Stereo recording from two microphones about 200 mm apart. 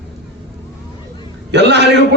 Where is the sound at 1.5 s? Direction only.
60° right (ahead or behind).